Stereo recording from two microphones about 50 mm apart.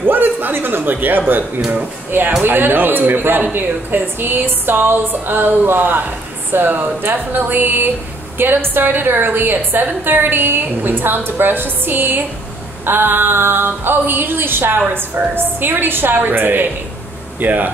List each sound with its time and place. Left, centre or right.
0.0 s a man's voice: right